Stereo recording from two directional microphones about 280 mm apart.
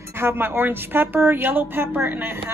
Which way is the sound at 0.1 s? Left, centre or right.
Centre.